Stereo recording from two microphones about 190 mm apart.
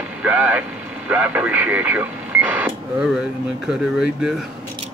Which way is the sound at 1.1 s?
10° right (ahead or behind).